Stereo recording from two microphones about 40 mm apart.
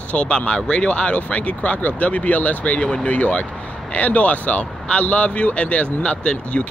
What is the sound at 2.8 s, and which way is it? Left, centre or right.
Speech, left.